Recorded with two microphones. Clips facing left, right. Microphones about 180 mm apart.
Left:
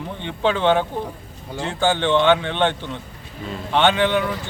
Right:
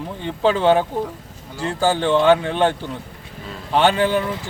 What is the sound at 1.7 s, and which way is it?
Speech, 40° right (ahead or behind).